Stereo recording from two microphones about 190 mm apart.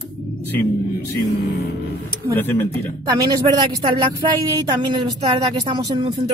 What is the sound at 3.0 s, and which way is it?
Speech, 20° right (ahead or behind).